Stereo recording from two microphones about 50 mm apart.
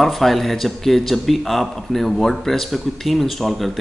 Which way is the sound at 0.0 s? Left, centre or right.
Centre.